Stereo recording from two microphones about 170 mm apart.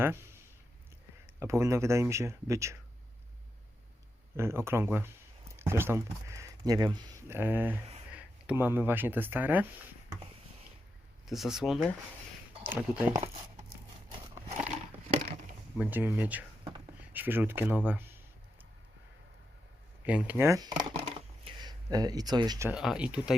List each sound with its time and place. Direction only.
0.0 s speech: 15° right (ahead or behind)
1.4 s speech: 15° right (ahead or behind)
4.4 s speech: 15° right (ahead or behind)
11.3 s speech: centre (ahead or behind)
15.8 s speech: 10° right (ahead or behind)
20.1 s speech: 10° right (ahead or behind)
21.0 s a sound: 35° right (ahead or behind)
22.7 s speech: 5° right (ahead or behind)